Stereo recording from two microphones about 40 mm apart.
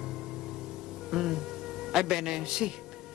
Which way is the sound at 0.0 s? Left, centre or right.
Centre.